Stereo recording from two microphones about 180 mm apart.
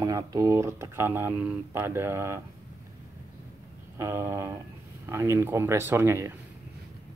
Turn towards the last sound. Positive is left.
turn(degrees=-15)  # may be behind; listen again after turning